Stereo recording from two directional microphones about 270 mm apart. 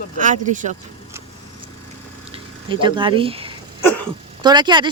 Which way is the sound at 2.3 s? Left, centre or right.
Centre.